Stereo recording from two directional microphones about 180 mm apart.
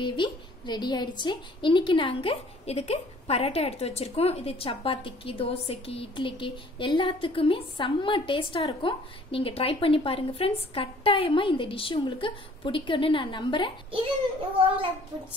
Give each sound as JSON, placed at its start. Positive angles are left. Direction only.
{"t": 0.0, "sound": "a woman's voice", "side_deg": 25}